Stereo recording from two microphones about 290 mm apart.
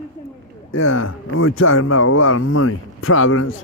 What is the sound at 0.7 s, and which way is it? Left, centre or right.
Speech, left.